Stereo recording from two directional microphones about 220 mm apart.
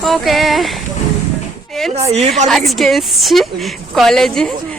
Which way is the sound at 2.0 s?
30° right (ahead or behind).